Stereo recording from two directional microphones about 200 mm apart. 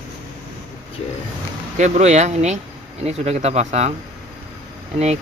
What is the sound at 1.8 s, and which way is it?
Speech, 35° right (ahead or behind).